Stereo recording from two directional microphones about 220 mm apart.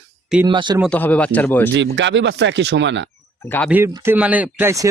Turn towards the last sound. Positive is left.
turn(degrees=-15)  # may be behind; listen again after turning